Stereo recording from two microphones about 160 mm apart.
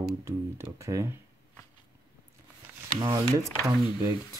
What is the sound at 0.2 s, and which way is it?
Speech, 15° right (ahead or behind).